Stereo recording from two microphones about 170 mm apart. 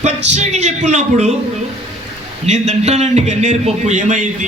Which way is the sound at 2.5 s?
40° right (ahead or behind).